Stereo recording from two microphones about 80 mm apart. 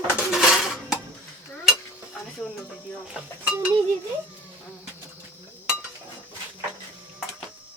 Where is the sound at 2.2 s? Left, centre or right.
Centre.